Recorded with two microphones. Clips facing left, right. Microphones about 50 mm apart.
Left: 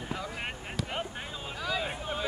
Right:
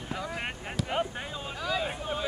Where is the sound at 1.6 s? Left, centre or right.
Centre.